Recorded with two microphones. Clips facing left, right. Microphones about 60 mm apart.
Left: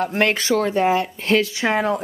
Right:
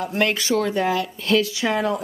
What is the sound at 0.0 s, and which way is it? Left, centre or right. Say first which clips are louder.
Speech: left 2 dB; left.